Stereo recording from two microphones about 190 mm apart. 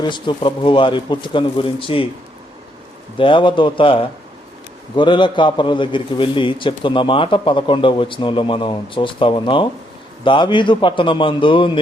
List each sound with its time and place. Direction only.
0.0 s a man's voice: 25° left (ahead or behind)
3.2 s a man's voice: 25° left (ahead or behind)